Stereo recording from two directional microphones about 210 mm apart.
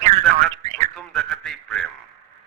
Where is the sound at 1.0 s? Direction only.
Centre (ahead or behind).